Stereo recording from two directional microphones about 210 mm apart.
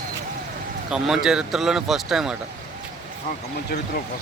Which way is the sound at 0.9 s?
Centre (ahead or behind).